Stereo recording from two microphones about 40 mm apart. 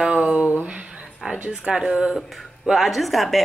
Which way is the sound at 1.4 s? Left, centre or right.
Centre.